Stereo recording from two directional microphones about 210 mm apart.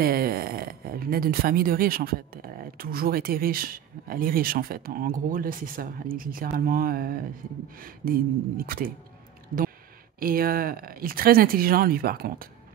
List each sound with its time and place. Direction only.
0.0 s speech: 45° right (ahead or behind)